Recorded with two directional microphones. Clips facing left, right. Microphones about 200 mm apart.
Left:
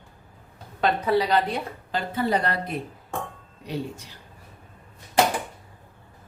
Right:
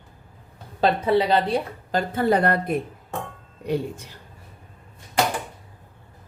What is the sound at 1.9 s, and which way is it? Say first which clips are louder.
Speech: right 4 dB; 50° right (ahead or behind).